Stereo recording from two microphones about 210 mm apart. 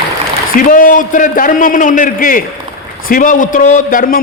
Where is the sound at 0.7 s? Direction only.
40° left (ahead or behind).